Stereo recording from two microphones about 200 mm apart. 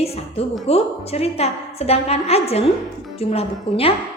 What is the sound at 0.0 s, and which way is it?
A woman's voice, 30° left (ahead or behind).